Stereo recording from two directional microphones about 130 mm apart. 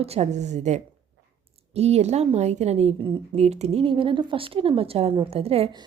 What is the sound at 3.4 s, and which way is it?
A woman's voice, 55° right (ahead or behind).